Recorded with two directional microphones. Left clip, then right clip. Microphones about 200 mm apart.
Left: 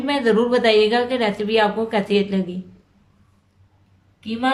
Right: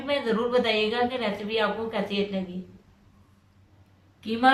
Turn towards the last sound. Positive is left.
turn(degrees=10)  # may be behind; listen again after turning